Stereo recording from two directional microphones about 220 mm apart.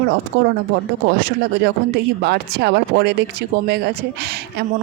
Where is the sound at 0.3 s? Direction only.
50° right (ahead or behind).